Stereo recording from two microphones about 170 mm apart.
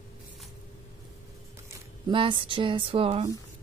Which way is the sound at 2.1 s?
30° right (ahead or behind).